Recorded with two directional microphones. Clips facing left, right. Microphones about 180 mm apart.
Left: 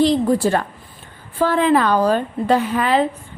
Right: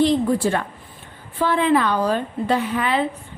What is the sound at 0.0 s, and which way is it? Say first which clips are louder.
A woman's voice: left 2 dB; 40° left (ahead or behind).